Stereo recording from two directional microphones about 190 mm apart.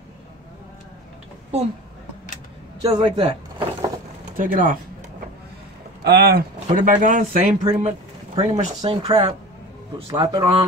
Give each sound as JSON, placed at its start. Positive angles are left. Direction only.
{"t": 2.9, "sound": "a man's voice", "side_deg": -25}
{"t": 4.4, "sound": "speech", "side_deg": -45}
{"t": 6.0, "sound": "speech", "side_deg": -55}